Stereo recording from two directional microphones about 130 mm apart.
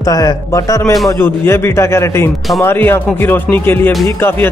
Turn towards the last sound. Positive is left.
turn(degrees=15)  # may be behind; listen again after turning